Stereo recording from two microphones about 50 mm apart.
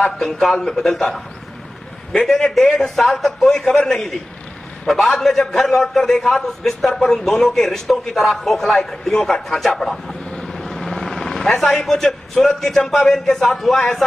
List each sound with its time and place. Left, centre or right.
0.0 s speech: centre
2.2 s a man's voice: centre
5.2 s a man's voice: centre
10.3 s vehicle: centre
11.8 s speech: centre